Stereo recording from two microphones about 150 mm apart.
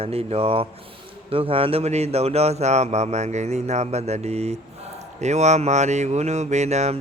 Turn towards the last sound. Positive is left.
turn(degrees=-50)  # may be behind; listen again after turning